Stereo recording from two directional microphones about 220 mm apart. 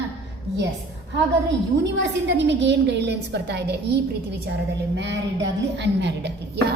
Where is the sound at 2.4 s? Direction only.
55° right (ahead or behind).